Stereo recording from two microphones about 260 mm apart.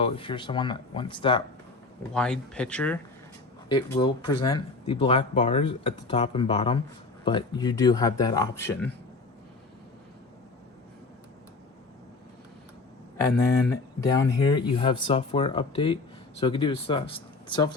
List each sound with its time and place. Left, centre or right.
0.0 s speech: centre
2.1 s speech: centre
3.7 s speech: centre
14.0 s speech: centre